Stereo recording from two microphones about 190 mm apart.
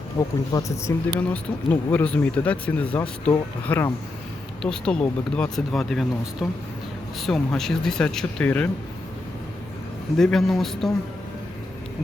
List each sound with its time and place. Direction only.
0.2 s speech: 15° left (ahead or behind)
10.2 s speech: centre (ahead or behind)